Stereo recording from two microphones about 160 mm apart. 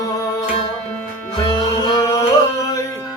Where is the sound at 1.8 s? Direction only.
25° left (ahead or behind).